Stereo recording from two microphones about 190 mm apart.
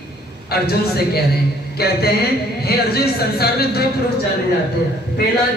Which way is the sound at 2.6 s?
55° left (ahead or behind).